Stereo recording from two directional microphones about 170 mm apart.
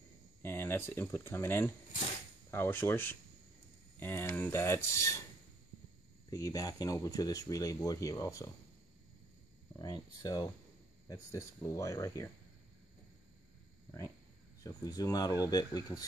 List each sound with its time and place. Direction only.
0.4 s speech: 15° left (ahead or behind)
6.3 s speech: 20° left (ahead or behind)
9.8 s speech: 20° left (ahead or behind)
14.6 s speech: 20° left (ahead or behind)